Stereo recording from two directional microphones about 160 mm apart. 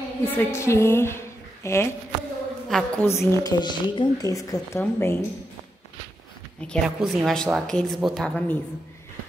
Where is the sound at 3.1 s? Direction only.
20° left (ahead or behind).